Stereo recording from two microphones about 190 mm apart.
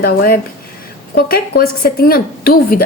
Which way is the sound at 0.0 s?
50° left (ahead or behind).